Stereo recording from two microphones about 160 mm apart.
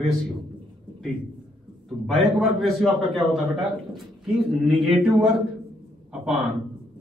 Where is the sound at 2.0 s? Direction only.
Centre (ahead or behind).